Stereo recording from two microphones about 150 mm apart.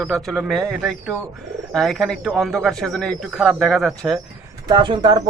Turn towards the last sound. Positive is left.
turn(degrees=-30)  # may be behind; listen again after turning